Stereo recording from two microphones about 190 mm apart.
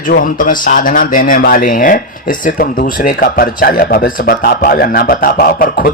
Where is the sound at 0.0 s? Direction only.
45° left (ahead or behind).